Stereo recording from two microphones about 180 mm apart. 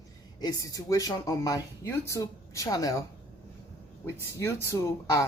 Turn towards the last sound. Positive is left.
turn(degrees=20)  # may be behind; listen again after turning